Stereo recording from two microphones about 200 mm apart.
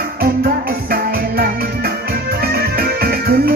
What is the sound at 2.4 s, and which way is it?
Music, 50° right (ahead or behind).